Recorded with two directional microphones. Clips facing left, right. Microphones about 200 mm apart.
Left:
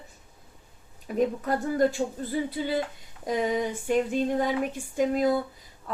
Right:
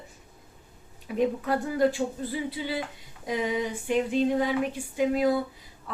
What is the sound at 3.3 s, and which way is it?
Speech, 45° left (ahead or behind).